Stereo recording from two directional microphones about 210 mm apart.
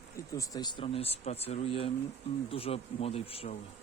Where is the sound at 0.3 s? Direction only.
20° left (ahead or behind).